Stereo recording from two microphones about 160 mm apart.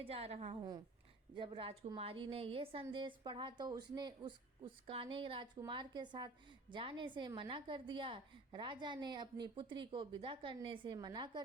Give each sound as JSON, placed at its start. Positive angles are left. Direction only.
{"t": 0.0, "sound": "a woman's voice", "side_deg": -35}